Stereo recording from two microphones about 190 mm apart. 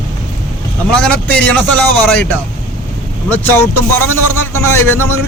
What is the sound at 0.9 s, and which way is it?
A man's voice, 5° left (ahead or behind).